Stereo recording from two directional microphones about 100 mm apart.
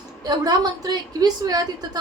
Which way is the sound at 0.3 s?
45° right (ahead or behind).